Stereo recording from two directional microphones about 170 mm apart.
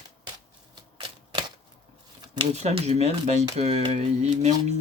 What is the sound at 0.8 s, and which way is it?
Typewriter, 25° right (ahead or behind).